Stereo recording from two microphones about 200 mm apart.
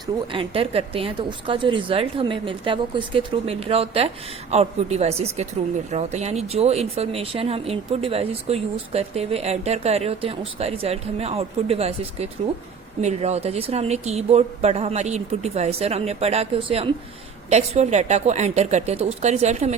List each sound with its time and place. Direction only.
0.3 s a woman's voice: 25° right (ahead or behind)